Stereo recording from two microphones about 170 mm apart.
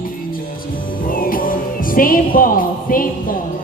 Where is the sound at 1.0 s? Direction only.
55° left (ahead or behind).